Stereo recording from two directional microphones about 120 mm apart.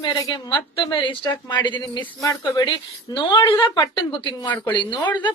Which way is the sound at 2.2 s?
30° left (ahead or behind).